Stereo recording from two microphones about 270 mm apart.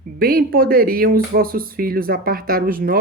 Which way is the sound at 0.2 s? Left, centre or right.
Right.